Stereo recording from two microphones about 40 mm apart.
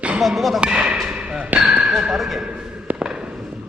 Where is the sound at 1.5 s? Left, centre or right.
Right.